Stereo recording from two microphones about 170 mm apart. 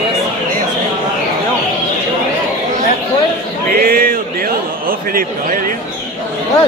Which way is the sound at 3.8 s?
60° right (ahead or behind).